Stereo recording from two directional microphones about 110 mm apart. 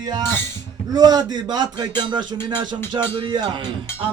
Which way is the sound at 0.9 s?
35° right (ahead or behind).